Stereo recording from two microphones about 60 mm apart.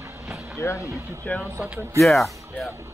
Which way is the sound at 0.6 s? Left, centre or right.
Left.